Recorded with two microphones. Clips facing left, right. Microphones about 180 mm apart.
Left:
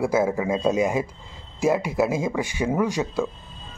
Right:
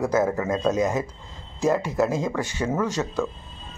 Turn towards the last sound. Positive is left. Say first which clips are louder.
# left 2 dB
turn(degrees=10)  # may be behind; listen again after turning